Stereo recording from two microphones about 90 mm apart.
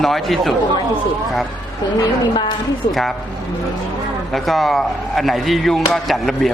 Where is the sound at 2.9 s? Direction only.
Centre (ahead or behind).